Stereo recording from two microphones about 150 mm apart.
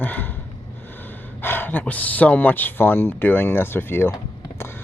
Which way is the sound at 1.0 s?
15° left (ahead or behind).